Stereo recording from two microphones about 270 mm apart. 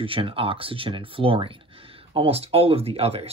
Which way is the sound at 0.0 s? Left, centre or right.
Centre.